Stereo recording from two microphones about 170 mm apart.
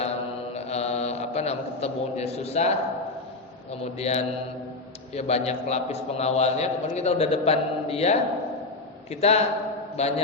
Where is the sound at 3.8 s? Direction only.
40° left (ahead or behind).